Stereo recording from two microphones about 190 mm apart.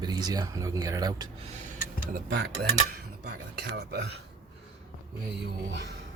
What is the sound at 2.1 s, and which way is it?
Speech, 55° right (ahead or behind).